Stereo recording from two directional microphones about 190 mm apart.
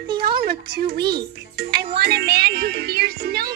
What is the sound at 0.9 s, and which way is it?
Speech, 55° right (ahead or behind).